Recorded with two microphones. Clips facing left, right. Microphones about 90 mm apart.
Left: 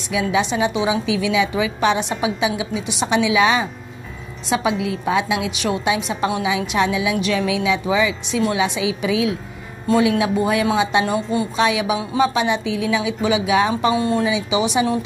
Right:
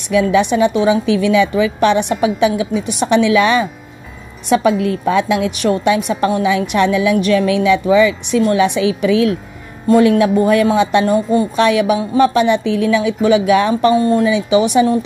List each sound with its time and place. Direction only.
0.1 s a woman's voice: 55° right (ahead or behind)
13.9 s a woman's voice: 45° right (ahead or behind)